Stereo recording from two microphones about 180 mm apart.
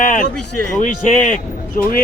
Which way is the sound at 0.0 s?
45° left (ahead or behind).